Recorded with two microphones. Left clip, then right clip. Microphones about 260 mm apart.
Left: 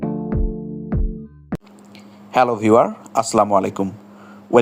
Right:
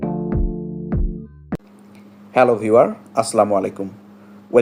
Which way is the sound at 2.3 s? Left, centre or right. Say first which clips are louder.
Right 1 dB; left.